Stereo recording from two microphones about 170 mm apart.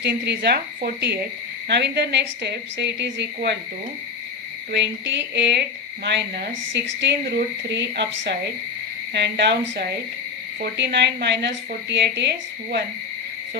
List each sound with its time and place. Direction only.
0.0 s a woman's voice: 80° right
4.7 s a woman's voice: 90° right